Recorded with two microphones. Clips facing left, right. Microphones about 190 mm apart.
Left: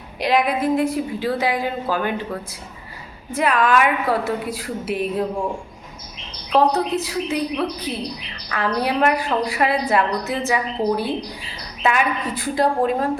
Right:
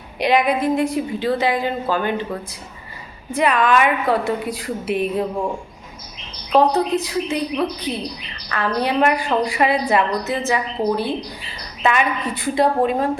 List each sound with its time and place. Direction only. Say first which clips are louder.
0.2 s a woman's voice: right 2 dB; centre (ahead or behind)
3.3 s a woman's voice: right 1 dB; 5° left (ahead or behind)
6.5 s a woman's voice: right 2 dB; 5° left (ahead or behind)